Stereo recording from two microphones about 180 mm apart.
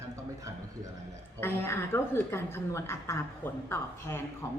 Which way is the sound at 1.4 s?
15° left (ahead or behind).